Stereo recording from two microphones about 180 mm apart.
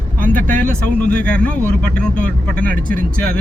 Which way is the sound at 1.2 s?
5° left (ahead or behind).